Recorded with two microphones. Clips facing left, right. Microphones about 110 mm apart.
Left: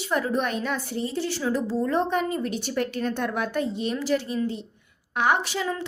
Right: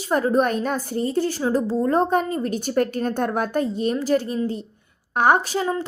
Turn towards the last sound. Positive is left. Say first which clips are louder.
# right 5 dB
turn(degrees=-35)  # may be behind; listen again after turning